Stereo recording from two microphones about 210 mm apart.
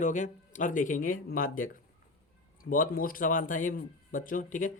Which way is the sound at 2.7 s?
40° left (ahead or behind).